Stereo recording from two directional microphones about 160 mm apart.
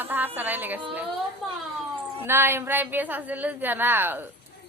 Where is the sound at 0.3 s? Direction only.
10° right (ahead or behind).